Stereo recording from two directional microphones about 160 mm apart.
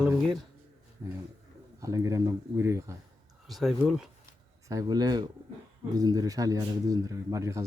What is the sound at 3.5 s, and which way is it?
Speech, centre (ahead or behind).